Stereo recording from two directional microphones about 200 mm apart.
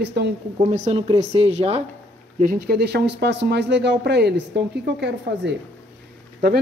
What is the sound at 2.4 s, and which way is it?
Speech, 45° right (ahead or behind).